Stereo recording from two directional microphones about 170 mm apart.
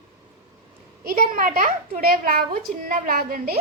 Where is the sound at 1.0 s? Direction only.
55° right (ahead or behind).